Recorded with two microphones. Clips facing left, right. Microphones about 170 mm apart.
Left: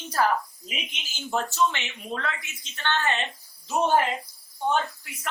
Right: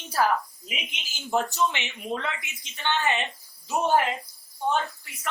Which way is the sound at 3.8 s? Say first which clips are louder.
Left 1 dB; centre (ahead or behind).